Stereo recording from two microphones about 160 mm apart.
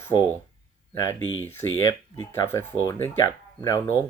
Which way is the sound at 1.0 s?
15° left (ahead or behind).